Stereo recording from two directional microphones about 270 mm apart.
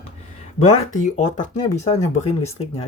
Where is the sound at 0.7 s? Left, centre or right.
Left.